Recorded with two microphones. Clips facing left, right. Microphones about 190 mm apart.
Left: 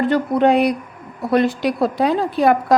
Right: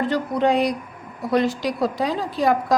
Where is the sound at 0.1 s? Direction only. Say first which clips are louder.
Left 6 dB; 60° left (ahead or behind).